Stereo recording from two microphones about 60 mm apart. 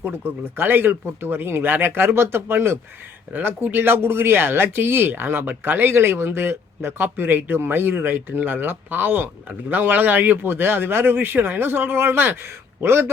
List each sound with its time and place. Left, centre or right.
0.0 s speech: right